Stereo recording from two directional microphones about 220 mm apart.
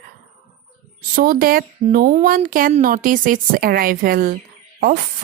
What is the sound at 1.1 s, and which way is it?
Speech, 40° right (ahead or behind).